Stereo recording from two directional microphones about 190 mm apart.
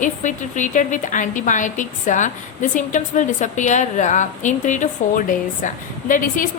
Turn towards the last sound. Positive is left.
turn(degrees=45)  # may be behind; listen again after turning